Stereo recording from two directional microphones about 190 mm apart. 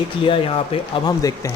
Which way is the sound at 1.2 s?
15° left (ahead or behind).